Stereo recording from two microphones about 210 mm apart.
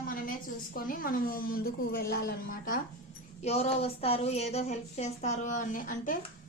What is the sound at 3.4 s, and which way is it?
A woman's voice, 30° left (ahead or behind).